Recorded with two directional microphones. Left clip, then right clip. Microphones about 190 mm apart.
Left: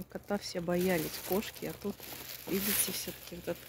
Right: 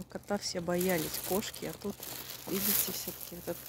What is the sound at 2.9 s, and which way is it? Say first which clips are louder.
Speech: left 1 dB; centre (ahead or behind).